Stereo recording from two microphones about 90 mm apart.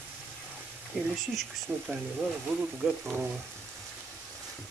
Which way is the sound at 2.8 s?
10° right (ahead or behind).